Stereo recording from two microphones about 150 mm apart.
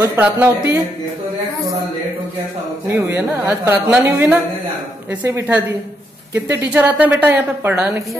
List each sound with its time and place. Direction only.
0.2 s a woman's voice: 15° right (ahead or behind)
2.9 s a woman's voice: 15° right (ahead or behind)